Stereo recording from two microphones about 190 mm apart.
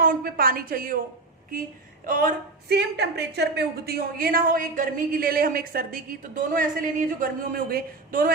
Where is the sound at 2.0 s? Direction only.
45° right (ahead or behind).